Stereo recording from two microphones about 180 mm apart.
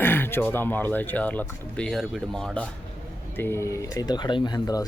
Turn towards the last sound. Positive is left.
turn(degrees=20)  # may be behind; listen again after turning